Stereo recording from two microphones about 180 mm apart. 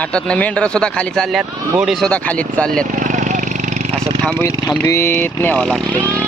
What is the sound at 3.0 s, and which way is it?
Vehicle, 45° right (ahead or behind).